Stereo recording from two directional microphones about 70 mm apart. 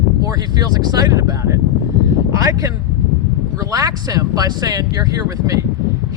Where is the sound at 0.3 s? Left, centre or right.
Right.